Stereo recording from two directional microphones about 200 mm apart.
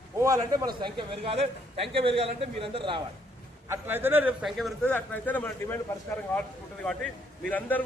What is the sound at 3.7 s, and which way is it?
A man's voice, 10° right (ahead or behind).